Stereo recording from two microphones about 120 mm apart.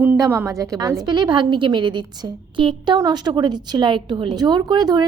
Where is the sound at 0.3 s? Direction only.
20° right (ahead or behind).